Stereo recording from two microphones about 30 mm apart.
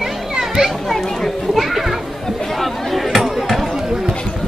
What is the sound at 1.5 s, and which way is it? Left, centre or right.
Speech, centre.